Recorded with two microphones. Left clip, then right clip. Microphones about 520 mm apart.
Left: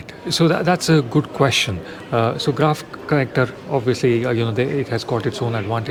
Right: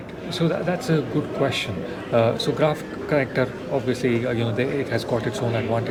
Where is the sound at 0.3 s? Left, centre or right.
Left.